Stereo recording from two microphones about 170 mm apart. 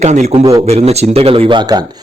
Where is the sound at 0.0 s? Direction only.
40° right (ahead or behind).